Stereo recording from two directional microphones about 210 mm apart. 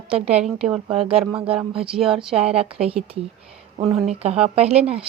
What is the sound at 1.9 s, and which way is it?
Speech, centre (ahead or behind).